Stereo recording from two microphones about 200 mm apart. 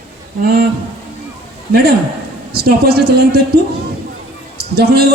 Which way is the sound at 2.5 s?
50° right (ahead or behind).